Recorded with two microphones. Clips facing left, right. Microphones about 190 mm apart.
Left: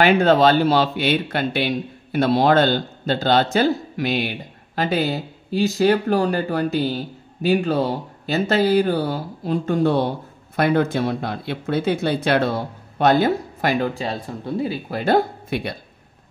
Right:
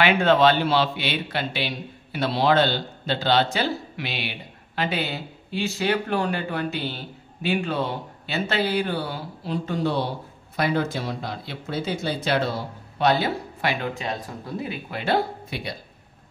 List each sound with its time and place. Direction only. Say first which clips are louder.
0.0 s speech: left 3 dB; 40° left (ahead or behind)